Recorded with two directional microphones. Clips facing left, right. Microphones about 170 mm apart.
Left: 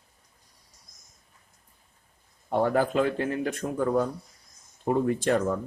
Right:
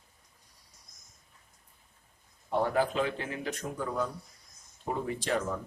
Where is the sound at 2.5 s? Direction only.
50° left (ahead or behind).